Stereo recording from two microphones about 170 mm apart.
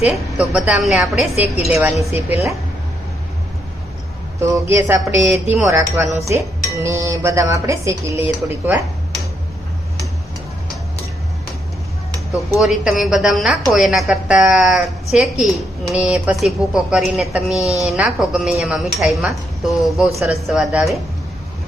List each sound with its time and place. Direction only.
0.0 s a woman's voice: 5° right (ahead or behind)
1.7 s dishes: 10° right (ahead or behind)
4.4 s dishes: 15° right (ahead or behind)
12.5 s a woman's voice: centre (ahead or behind)